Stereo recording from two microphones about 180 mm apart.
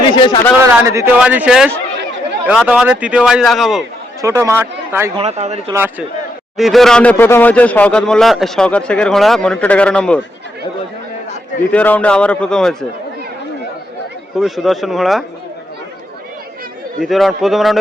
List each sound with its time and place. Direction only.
0.0 s a sound: 25° left (ahead or behind)
0.6 s speech: 15° right (ahead or behind); by 3.8 s centre (ahead or behind)
4.2 s speech: 15° right (ahead or behind)
5.1 s speech: 35° right (ahead or behind)
5.7 s speech: 10° right (ahead or behind)
6.6 s speech: centre (ahead or behind)
11.7 s a man's voice: 10° left (ahead or behind)
14.3 s speech: centre (ahead or behind)
17.0 s speech: centre (ahead or behind)